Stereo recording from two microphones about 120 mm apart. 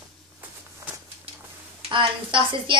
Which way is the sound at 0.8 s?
25° right (ahead or behind).